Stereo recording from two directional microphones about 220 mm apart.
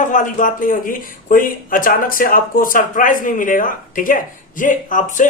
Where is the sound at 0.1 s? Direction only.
35° left (ahead or behind).